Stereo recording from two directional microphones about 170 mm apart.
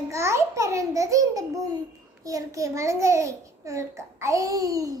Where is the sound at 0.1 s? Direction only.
15° right (ahead or behind).